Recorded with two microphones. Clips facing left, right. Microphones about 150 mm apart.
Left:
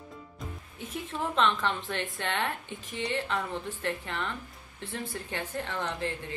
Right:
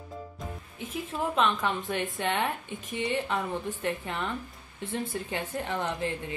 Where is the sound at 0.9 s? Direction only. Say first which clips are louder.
Right 1 dB; 10° right (ahead or behind).